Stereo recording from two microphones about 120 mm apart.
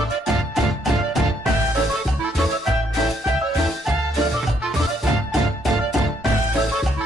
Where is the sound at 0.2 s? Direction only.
Centre (ahead or behind).